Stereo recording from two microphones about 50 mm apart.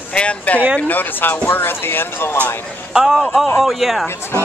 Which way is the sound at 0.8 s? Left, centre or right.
Left.